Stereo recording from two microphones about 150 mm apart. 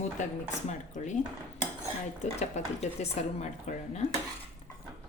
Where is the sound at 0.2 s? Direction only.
55° left (ahead or behind).